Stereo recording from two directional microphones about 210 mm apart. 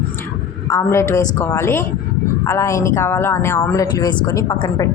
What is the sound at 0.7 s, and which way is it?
Speech, 15° left (ahead or behind).